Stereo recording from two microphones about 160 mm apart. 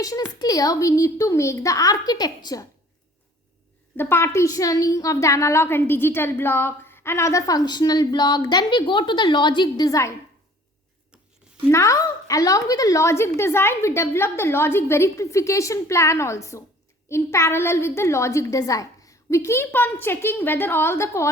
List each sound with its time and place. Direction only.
0.0 s a woman's voice: 25° left (ahead or behind)
3.9 s a woman's voice: 15° left (ahead or behind)
11.7 s a woman's voice: 20° left (ahead or behind)